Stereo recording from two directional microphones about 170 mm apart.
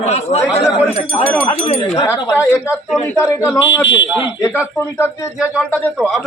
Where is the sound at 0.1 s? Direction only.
40° left (ahead or behind).